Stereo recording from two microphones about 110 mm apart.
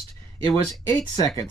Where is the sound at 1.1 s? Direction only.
30° left (ahead or behind).